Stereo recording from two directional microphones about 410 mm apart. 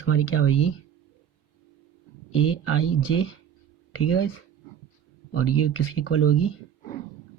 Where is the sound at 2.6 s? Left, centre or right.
Left.